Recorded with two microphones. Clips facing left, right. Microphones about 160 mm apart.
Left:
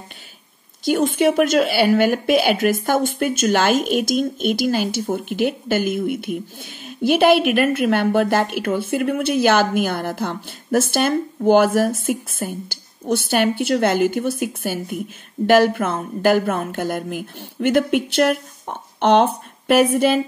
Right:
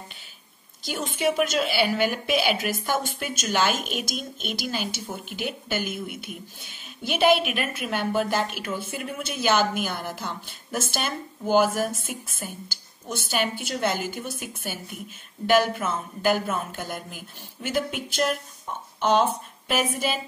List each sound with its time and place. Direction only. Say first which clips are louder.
0.8 s a woman's voice: left 9 dB; 50° left (ahead or behind)